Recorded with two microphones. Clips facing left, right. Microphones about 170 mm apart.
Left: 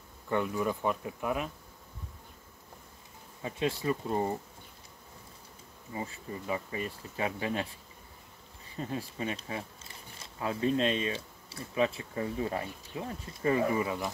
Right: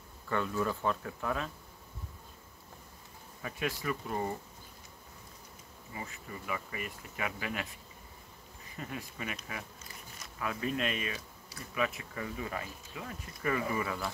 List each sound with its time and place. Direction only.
0.3 s speech: 15° left (ahead or behind)
3.4 s speech: 25° left (ahead or behind)
5.9 s speech: 30° left (ahead or behind)